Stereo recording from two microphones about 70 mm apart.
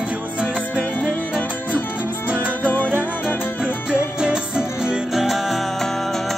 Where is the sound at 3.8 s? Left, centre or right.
Centre.